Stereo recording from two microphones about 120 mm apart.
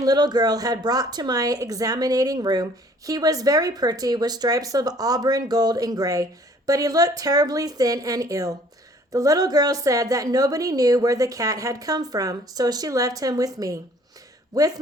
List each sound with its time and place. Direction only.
0.0 s a woman's voice: 35° right (ahead or behind)